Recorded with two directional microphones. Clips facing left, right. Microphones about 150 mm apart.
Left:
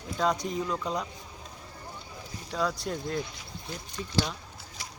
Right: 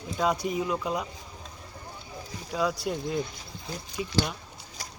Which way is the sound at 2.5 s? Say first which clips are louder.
Right 2 dB; 5° right (ahead or behind).